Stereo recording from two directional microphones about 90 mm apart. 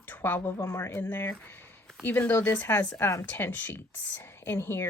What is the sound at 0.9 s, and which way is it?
Speech, 20° left (ahead or behind).